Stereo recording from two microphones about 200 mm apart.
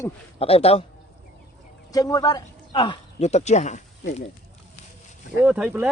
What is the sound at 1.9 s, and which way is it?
Speech, 15° left (ahead or behind).